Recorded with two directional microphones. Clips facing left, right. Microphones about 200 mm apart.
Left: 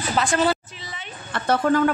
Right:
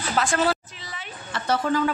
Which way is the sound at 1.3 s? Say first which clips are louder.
Left 4 dB; 55° left (ahead or behind).